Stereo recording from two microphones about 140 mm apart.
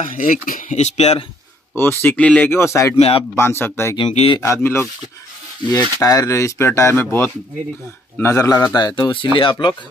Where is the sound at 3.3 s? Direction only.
15° left (ahead or behind).